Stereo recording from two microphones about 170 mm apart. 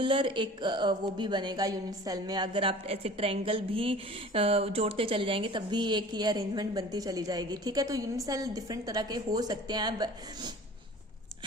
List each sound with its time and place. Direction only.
0.0 s speech: 30° right (ahead or behind)